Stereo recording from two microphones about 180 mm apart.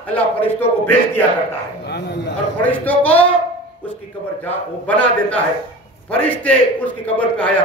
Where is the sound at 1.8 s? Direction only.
70° left (ahead or behind).